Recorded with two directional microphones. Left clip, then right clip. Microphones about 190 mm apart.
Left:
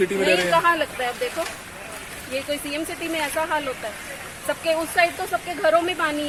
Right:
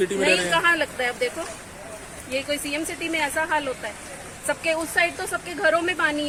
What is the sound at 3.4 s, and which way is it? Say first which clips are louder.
Speech: even; 5° right (ahead or behind).